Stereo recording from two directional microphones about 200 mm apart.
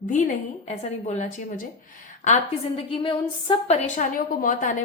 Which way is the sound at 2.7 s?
25° left (ahead or behind).